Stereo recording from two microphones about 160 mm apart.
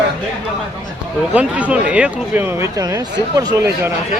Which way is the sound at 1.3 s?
10° right (ahead or behind).